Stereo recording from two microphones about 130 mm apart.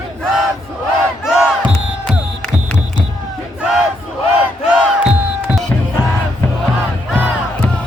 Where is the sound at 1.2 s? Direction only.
5° right (ahead or behind).